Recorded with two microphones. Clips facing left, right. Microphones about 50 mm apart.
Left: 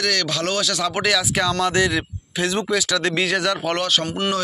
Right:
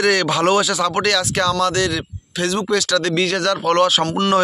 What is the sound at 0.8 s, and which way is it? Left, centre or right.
Speech, centre.